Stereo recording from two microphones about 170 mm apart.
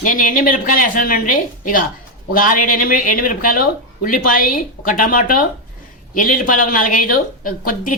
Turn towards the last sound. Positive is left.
turn(degrees=55)  # may be behind; listen again after turning